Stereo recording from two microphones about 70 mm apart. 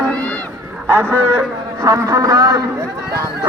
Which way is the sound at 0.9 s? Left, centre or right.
Right.